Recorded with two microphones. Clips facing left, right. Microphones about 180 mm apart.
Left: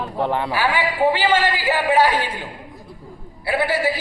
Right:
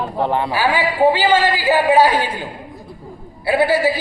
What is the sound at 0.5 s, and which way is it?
Speech, 30° right (ahead or behind).